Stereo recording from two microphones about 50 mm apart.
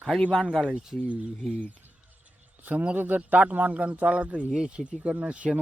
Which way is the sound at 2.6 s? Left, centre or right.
Right.